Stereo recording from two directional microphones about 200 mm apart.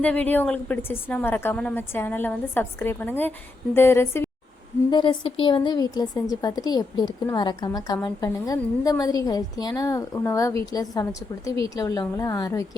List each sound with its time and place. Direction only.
0.0 s a woman's voice: 10° left (ahead or behind)
4.9 s a woman's voice: 25° left (ahead or behind)